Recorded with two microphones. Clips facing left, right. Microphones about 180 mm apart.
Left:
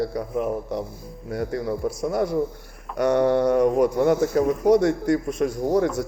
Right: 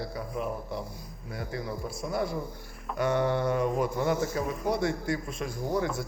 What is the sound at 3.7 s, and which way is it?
Speech, 40° left (ahead or behind).